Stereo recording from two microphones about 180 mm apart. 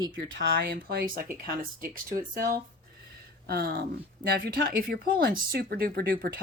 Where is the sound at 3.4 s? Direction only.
55° right (ahead or behind).